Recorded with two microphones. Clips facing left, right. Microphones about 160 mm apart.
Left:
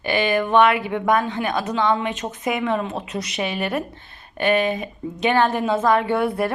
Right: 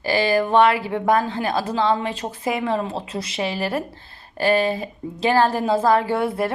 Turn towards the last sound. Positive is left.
turn(degrees=-25)  # may be behind; listen again after turning